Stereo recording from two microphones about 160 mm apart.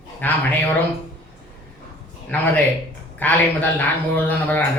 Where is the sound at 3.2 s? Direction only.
10° left (ahead or behind).